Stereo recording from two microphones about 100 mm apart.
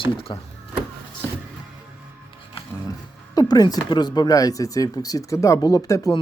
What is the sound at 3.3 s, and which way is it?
Speech, 40° left (ahead or behind).